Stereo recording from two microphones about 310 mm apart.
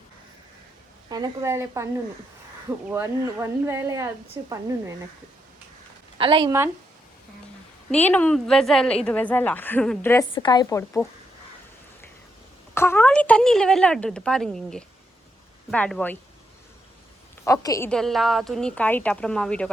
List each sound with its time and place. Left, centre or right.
1.1 s speech: centre
6.1 s speech: centre
7.9 s a woman's voice: centre
12.7 s a woman's voice: centre
17.4 s a woman's voice: centre